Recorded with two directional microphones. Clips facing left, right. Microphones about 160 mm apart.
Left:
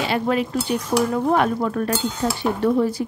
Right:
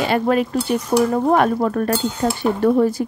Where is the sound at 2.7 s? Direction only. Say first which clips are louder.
Right 3 dB; 45° right (ahead or behind).